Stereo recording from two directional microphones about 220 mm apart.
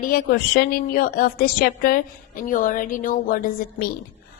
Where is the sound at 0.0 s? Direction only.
40° left (ahead or behind).